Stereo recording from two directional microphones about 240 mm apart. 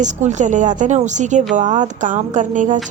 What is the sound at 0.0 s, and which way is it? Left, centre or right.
A woman's voice, right.